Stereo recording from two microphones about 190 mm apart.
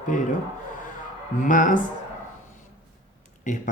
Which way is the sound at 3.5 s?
40° left (ahead or behind).